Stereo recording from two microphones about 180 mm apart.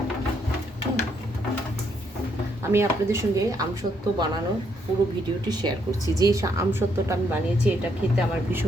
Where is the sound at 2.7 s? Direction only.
15° right (ahead or behind).